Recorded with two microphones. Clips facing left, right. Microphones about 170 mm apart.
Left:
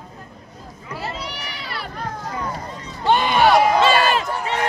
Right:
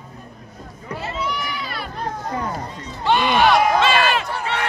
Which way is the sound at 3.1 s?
45° left (ahead or behind).